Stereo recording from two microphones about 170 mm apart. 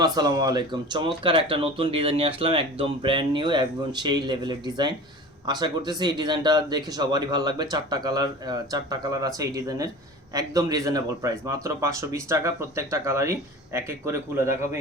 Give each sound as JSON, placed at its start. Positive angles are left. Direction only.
{"t": 0.0, "sound": "a man's voice", "side_deg": -25}